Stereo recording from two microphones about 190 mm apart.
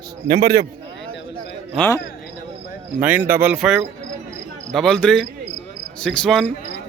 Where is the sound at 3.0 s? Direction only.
10° right (ahead or behind).